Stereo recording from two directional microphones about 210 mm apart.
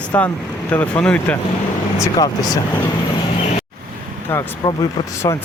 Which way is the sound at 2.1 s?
15° left (ahead or behind).